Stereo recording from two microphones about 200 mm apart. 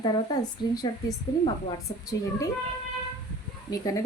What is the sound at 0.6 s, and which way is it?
Speech, 20° left (ahead or behind).